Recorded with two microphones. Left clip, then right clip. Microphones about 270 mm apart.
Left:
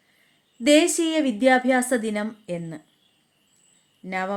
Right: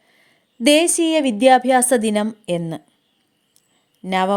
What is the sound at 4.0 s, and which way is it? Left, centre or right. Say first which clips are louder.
Speech: right 9 dB; right.